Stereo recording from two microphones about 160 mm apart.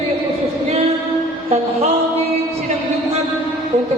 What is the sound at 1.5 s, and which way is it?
Music, 40° right (ahead or behind).